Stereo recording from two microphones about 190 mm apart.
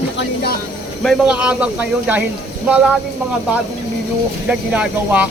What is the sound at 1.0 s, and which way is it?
Speech, 5° right (ahead or behind).